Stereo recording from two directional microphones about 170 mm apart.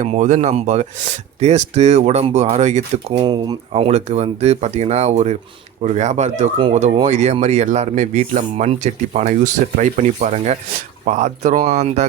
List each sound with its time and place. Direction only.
0.0 s speech: 45° right (ahead or behind)
3.2 s speech: 25° right (ahead or behind)
3.7 s speech: 35° right (ahead or behind)